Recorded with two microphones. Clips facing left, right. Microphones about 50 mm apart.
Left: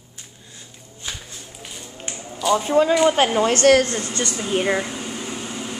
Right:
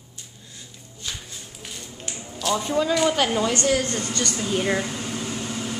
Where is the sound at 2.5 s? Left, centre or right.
Left.